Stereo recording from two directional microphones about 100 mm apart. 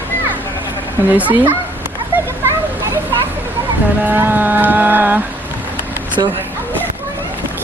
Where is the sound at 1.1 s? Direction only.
15° right (ahead or behind).